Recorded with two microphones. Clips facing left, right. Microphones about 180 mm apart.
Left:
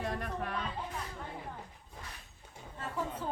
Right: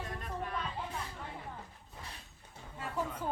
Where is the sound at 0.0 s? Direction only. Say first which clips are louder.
Left 4 dB; 70° left (ahead or behind).